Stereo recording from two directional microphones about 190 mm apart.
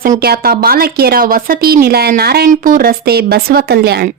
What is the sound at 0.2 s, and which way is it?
A woman's voice, 55° right (ahead or behind).